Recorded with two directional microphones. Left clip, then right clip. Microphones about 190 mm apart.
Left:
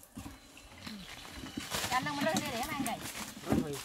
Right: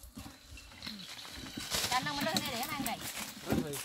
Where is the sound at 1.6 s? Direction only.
50° right (ahead or behind).